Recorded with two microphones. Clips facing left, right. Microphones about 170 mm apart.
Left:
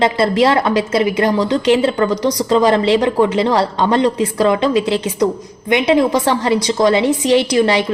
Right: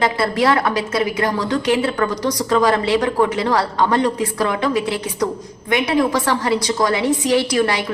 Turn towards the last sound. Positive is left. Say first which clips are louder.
# left 4 dB
turn(degrees=25)  # may be behind; listen again after turning